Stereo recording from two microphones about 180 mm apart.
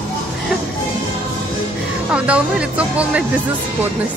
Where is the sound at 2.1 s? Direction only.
5° right (ahead or behind).